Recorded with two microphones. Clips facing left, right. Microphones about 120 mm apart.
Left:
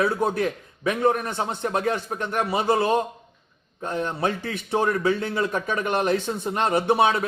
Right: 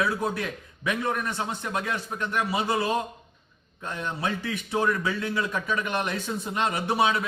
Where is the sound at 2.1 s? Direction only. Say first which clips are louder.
Left 3 dB; 45° left (ahead or behind).